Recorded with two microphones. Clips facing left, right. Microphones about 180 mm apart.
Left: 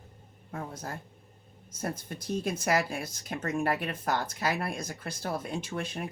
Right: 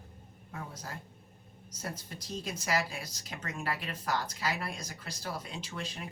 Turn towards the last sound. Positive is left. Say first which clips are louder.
# left 7 dB
turn(degrees=55)  # may be behind; listen again after turning